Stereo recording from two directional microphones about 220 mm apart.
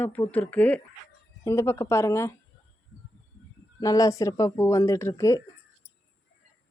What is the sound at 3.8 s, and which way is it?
A woman's voice, 15° left (ahead or behind).